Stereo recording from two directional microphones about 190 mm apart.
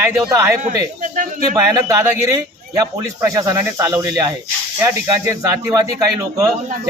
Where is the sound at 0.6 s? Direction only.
45° right (ahead or behind).